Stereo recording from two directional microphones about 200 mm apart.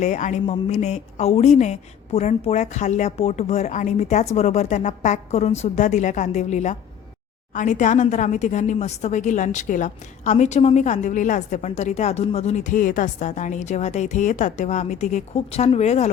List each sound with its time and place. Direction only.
0.0 s speech: 35° left (ahead or behind)